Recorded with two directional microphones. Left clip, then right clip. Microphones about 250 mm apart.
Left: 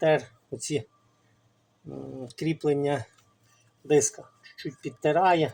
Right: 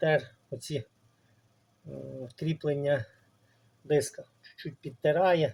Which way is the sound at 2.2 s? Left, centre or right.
Centre.